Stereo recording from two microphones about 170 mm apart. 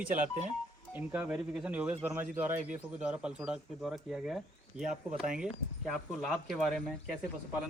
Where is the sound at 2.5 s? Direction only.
45° right (ahead or behind).